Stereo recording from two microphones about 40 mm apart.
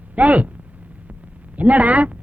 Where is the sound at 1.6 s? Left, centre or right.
Right.